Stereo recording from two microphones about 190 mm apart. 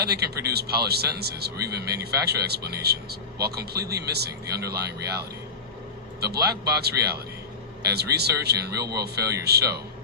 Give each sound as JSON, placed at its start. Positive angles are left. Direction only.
{"t": 0.0, "sound": "speech", "side_deg": -60}